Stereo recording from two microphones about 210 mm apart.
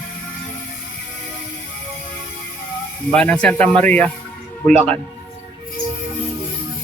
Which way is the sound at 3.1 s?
5° left (ahead or behind).